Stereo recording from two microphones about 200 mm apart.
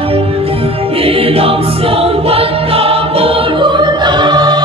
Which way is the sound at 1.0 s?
30° right (ahead or behind).